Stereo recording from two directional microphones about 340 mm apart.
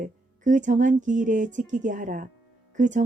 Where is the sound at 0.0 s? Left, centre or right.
Right.